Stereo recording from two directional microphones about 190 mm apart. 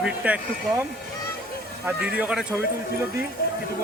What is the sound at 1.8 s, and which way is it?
Speech, 5° right (ahead or behind).